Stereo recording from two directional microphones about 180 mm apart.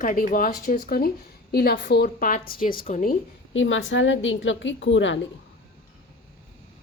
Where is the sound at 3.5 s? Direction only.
90° left.